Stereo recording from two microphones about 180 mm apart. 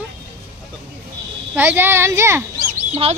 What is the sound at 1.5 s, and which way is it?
Speech, 10° right (ahead or behind).